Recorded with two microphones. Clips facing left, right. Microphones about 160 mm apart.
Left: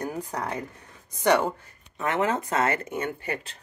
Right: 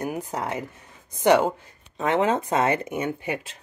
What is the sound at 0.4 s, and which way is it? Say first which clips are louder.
Speech: right 2 dB; 10° right (ahead or behind).